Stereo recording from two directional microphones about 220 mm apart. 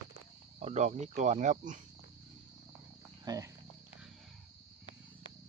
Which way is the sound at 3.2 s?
15° right (ahead or behind).